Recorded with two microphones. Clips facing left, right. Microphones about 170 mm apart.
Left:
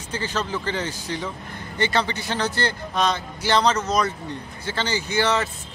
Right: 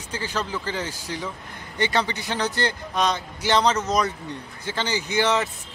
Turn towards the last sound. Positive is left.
turn(degrees=-15)  # may be behind; listen again after turning